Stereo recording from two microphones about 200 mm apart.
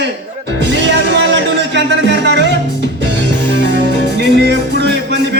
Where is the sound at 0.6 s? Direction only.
60° right (ahead or behind).